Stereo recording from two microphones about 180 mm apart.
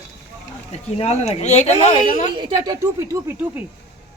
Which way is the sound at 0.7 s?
35° left (ahead or behind).